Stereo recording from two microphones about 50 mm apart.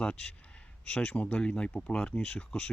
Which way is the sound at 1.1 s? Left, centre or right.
Left.